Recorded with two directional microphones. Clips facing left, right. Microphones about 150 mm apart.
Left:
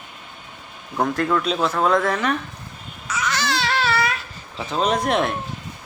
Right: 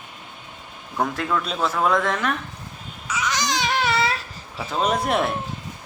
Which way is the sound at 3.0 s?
10° right (ahead or behind).